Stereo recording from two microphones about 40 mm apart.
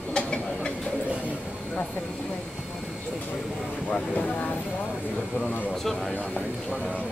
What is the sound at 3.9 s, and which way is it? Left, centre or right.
Vehicle, left.